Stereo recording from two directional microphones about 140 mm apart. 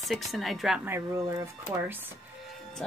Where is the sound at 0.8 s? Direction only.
15° right (ahead or behind).